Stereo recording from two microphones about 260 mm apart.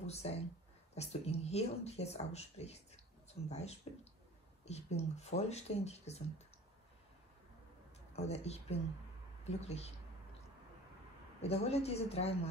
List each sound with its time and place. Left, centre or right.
0.0 s speech: left
8.2 s speech: left
11.4 s speech: left